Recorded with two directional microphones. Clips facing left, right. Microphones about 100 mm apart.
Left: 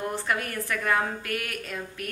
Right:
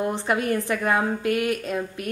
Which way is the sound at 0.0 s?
20° right (ahead or behind).